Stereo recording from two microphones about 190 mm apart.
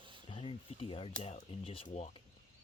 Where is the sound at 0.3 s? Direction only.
30° left (ahead or behind).